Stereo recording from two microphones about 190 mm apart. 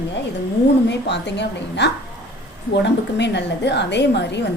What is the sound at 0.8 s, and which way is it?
A woman's voice, 65° left (ahead or behind).